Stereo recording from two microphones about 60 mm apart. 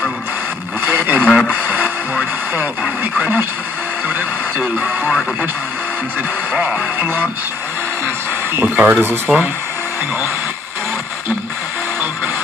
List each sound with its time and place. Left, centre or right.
0.8 s vehicle: right
1.5 s music: right
3.0 s speech: right
7.0 s speech: right
8.5 s speech: right
9.3 s speech: centre